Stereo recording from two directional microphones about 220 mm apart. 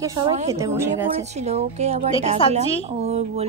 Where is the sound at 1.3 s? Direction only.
30° right (ahead or behind).